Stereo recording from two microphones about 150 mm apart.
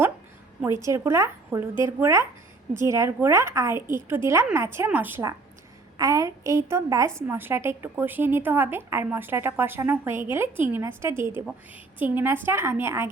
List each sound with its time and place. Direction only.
0.6 s a woman's voice: 20° right (ahead or behind)